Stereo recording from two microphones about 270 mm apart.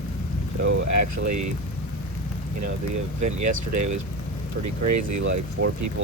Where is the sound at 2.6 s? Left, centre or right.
Right.